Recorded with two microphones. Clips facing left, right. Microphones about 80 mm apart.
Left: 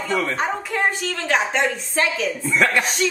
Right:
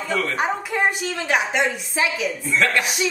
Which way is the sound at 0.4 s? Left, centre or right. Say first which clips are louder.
Right 1 dB; centre.